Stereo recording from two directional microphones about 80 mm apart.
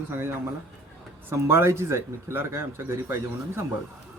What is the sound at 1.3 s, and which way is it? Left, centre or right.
Speech, right.